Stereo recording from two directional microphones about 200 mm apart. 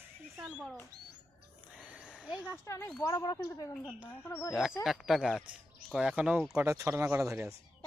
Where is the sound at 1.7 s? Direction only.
5° right (ahead or behind).